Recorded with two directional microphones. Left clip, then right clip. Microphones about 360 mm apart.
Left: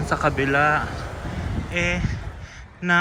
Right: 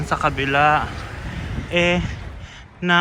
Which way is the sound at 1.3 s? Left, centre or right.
Left.